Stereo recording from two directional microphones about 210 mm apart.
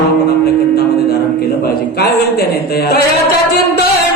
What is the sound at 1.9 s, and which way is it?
A man's voice, 45° left (ahead or behind).